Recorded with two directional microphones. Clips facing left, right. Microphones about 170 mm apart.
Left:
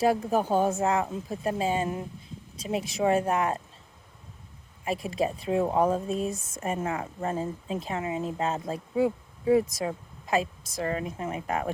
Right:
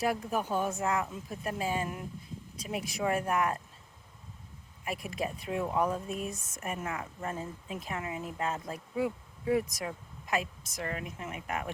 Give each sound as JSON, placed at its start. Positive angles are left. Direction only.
{"t": 0.0, "sound": "speech", "side_deg": 30}
{"t": 4.9, "sound": "speech", "side_deg": 25}